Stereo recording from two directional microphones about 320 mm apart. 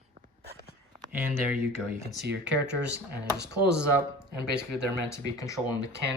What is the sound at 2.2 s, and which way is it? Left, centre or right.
Speech, right.